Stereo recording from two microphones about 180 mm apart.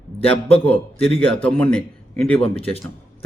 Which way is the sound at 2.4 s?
30° left (ahead or behind).